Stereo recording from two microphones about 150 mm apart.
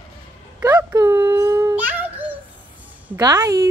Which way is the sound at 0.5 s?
10° right (ahead or behind).